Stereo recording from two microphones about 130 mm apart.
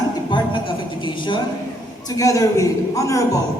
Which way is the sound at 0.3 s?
40° left (ahead or behind).